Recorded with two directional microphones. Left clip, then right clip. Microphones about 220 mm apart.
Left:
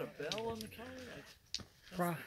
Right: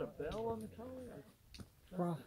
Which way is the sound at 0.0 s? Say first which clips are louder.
Left 1 dB; 10° left (ahead or behind).